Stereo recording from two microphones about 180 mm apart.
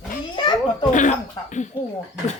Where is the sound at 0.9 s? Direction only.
45° left (ahead or behind).